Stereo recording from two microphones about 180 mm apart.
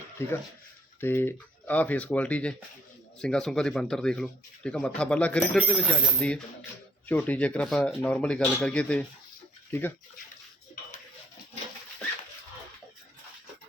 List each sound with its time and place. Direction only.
0.2 s speech: 15° left (ahead or behind)